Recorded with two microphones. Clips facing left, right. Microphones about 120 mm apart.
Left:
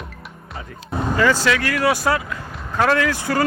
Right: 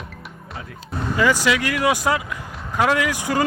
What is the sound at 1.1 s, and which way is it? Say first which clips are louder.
Speech: left 1 dB; 15° right (ahead or behind).